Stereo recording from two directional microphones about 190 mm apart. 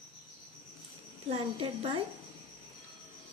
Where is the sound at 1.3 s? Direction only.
30° right (ahead or behind).